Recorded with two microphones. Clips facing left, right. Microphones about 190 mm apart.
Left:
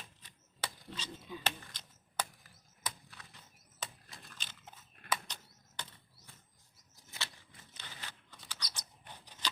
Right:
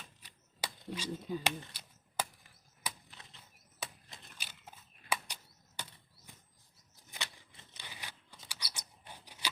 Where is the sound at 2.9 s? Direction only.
20° right (ahead or behind).